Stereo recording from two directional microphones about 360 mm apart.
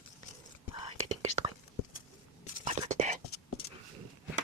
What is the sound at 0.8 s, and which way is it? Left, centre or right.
Whispering, centre.